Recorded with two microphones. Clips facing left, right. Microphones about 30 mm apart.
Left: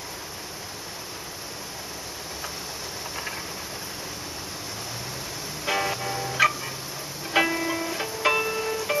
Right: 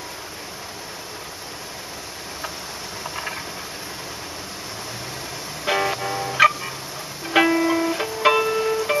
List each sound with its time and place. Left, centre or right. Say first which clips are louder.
5.7 s music: right 4 dB; centre